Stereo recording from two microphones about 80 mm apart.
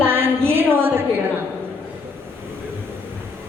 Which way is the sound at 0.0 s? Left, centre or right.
Right.